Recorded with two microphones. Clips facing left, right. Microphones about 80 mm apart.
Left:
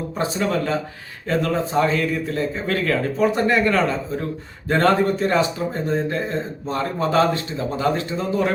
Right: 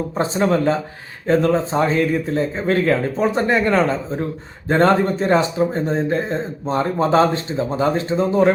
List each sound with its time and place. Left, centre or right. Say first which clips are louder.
0.2 s a man's voice: right 4 dB; right